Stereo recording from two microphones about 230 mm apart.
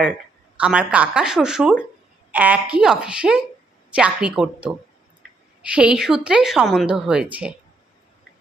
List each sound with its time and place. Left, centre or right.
0.6 s a woman's voice: centre